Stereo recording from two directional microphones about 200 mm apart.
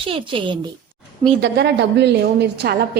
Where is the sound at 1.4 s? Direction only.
55° right (ahead or behind).